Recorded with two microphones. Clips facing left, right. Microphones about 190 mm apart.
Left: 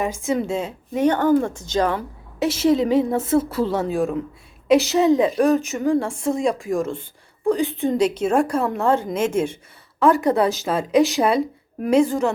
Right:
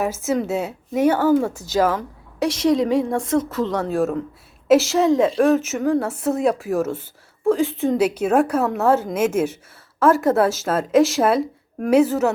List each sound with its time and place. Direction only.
0.0 s speech: 5° right (ahead or behind)
2.0 s a woman's voice: 5° left (ahead or behind)